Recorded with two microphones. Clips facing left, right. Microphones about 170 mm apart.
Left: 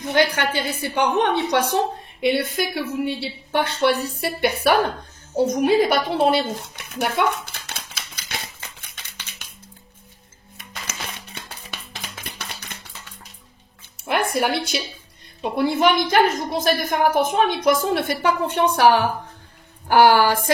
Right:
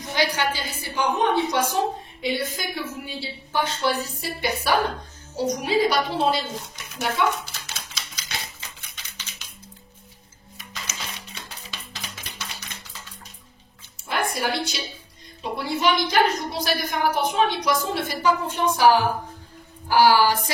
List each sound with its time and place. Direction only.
0.0 s a woman's voice: 60° left (ahead or behind)
7.2 s typewriter: 55° left (ahead or behind)
10.6 s a sound: 55° left (ahead or behind)
14.0 s music: 60° left (ahead or behind)
15.5 s a woman's voice: 55° left (ahead or behind)